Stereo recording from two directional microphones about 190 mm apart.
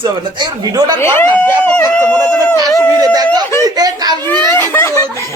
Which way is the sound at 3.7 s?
20° right (ahead or behind).